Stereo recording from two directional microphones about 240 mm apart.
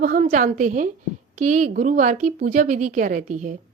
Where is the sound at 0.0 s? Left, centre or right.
Right.